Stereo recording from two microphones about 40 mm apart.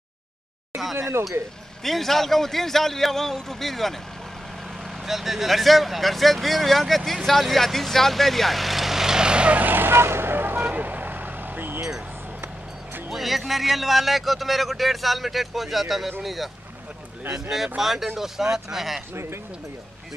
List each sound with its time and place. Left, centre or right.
1.8 s a man's voice: centre
5.0 s speech: centre; by 9.5 s right
9.5 s vehicle: right
10.6 s vehicle: right
13.1 s speech: centre
17.7 s speech: centre